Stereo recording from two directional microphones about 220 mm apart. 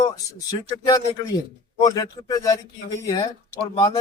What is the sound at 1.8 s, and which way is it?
A man's voice, 15° left (ahead or behind).